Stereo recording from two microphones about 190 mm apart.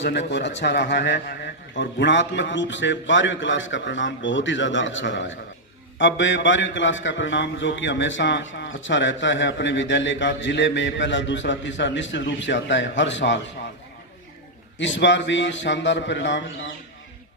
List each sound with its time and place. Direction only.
0.0 s speech: 65° left (ahead or behind)
14.8 s speech: 75° left (ahead or behind)